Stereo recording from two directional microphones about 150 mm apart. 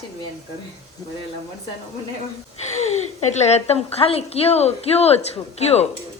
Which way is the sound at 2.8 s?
50° left (ahead or behind).